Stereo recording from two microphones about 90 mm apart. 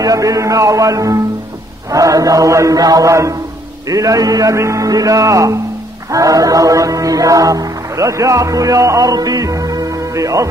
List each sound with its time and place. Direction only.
0.0 s speech: 40° right (ahead or behind)